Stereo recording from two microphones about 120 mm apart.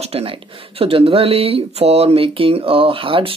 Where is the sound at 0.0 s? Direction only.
55° right (ahead or behind).